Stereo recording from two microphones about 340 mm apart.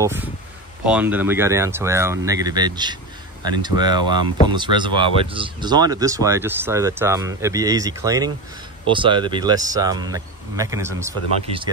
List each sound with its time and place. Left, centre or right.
0.0 s speech: centre